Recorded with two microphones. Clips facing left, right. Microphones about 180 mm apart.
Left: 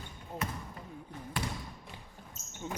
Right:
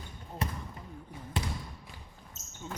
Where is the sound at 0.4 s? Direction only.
30° right (ahead or behind).